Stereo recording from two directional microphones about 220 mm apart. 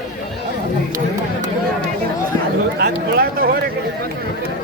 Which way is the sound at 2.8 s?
40° right (ahead or behind).